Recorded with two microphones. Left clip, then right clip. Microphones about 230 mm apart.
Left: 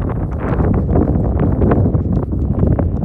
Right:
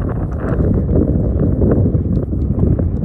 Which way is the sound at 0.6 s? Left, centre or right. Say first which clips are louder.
Even; centre.